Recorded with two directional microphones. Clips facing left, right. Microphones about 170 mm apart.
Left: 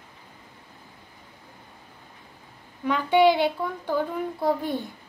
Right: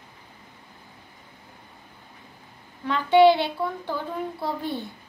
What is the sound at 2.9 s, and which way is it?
Child singing, 15° left (ahead or behind).